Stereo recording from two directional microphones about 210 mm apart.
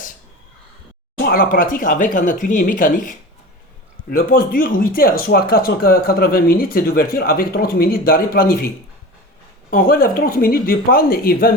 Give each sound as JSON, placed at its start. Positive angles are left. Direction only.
{"t": 1.2, "sound": "speech", "side_deg": 45}